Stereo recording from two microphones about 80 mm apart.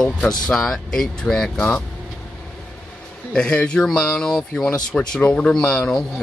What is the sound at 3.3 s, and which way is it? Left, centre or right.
Speech, centre.